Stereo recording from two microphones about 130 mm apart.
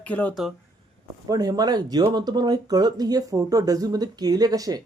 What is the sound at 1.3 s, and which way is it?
Speech, 30° right (ahead or behind).